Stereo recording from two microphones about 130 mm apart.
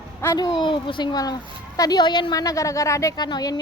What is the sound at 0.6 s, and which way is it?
A woman's voice, 40° left (ahead or behind).